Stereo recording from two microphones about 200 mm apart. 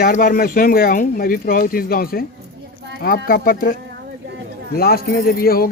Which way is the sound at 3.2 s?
45° left (ahead or behind).